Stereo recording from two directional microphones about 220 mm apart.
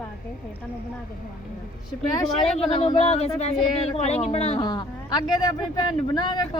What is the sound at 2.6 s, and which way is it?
Speech, 25° left (ahead or behind).